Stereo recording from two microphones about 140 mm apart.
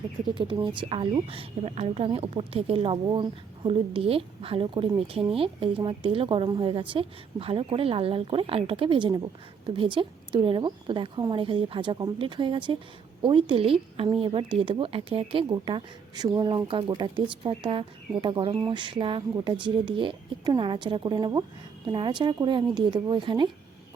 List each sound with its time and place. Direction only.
0.6 s speech: 35° right (ahead or behind)